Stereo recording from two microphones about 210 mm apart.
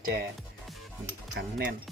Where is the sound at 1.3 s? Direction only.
50° right (ahead or behind).